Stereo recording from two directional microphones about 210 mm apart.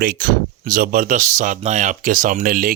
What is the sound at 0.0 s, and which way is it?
Speech, 45° right (ahead or behind).